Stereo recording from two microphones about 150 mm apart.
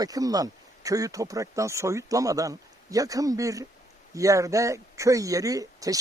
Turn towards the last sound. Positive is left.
turn(degrees=-25)  # may be behind; listen again after turning